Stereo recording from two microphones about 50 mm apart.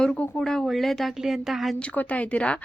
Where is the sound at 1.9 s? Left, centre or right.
Left.